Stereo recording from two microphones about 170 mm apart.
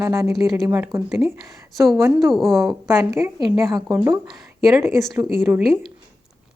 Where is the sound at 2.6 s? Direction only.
15° right (ahead or behind).